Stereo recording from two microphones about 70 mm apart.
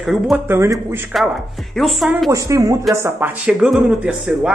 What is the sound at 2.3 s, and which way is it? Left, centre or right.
Speech, right.